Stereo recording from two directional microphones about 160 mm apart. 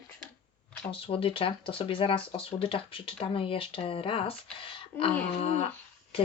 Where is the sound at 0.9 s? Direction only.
35° left (ahead or behind).